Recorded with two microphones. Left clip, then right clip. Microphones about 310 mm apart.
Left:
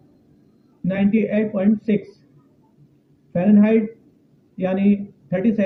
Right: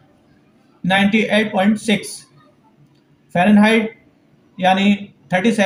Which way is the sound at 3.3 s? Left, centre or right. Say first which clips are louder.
Right 4 dB; centre.